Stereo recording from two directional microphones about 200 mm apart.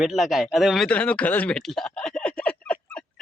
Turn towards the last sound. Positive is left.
turn(degrees=5)  # may be behind; listen again after turning